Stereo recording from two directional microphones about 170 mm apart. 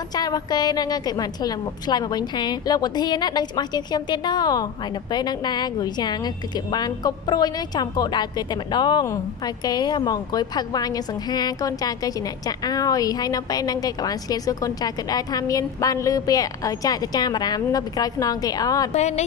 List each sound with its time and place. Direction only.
0.1 s a woman's voice: 25° left (ahead or behind)
18.9 s speech: 40° left (ahead or behind)